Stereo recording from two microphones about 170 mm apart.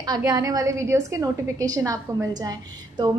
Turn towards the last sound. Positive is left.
turn(degrees=-25)  # may be behind; listen again after turning